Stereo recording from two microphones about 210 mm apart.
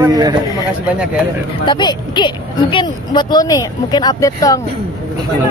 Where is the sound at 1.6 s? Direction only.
20° left (ahead or behind).